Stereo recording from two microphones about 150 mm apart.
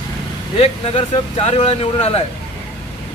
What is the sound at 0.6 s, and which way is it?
Speech, 40° left (ahead or behind).